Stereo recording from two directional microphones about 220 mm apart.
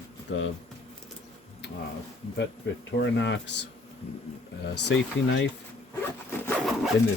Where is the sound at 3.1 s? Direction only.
55° left (ahead or behind).